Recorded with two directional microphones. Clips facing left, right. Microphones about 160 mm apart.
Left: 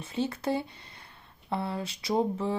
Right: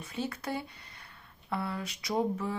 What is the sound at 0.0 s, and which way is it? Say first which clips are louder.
Speech: left 5 dB; 25° left (ahead or behind).